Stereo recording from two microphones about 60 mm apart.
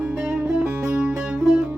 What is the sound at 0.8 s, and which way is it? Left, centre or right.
Music, centre.